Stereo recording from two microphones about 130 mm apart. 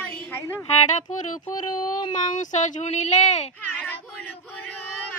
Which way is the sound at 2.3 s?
70° left (ahead or behind).